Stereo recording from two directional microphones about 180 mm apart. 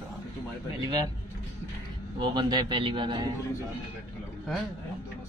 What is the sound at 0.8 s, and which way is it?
Speech, 20° right (ahead or behind).